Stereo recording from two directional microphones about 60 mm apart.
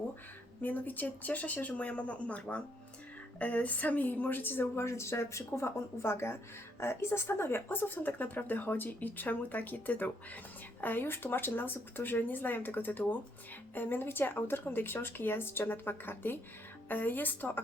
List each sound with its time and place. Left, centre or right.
0.6 s speech: left
4.8 s speech: left